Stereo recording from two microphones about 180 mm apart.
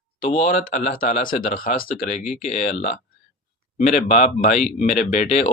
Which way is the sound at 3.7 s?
45° left (ahead or behind).